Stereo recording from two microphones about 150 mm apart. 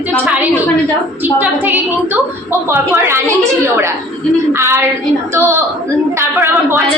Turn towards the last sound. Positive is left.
turn(degrees=-15)  # may be behind; listen again after turning